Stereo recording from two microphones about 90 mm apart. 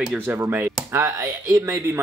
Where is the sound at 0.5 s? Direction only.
25° right (ahead or behind).